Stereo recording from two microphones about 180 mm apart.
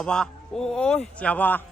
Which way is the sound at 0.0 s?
5° left (ahead or behind).